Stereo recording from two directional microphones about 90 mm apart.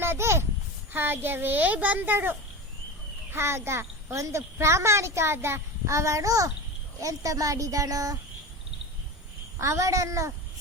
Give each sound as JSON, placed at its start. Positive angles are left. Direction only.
{"t": 0.0, "sound": "a sound", "side_deg": -30}
{"t": 0.9, "sound": "a child's voice", "side_deg": -25}
{"t": 3.3, "sound": "a child's voice", "side_deg": -30}
{"t": 9.6, "sound": "a child's voice", "side_deg": -35}